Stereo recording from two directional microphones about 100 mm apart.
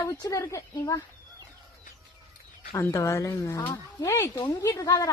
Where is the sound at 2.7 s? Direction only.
25° left (ahead or behind).